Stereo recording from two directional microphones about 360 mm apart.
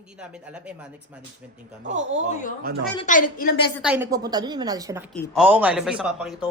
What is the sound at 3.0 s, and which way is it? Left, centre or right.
Speech, left.